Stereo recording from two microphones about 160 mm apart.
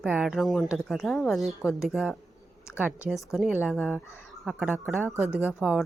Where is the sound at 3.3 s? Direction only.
5° right (ahead or behind).